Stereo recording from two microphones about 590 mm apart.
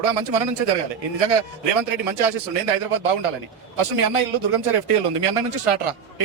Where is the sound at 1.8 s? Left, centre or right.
Right.